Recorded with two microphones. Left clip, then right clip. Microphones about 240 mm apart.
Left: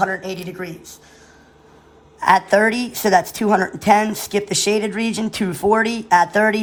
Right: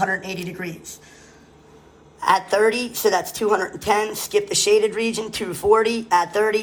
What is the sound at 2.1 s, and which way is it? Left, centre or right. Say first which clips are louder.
A woman's voice: left 4 dB; left.